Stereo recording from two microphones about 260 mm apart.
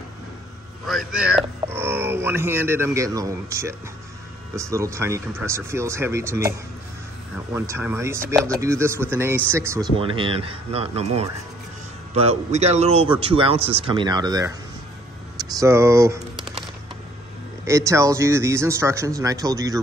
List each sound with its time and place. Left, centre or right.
0.8 s speech: centre
7.5 s speech: centre
17.6 s speech: centre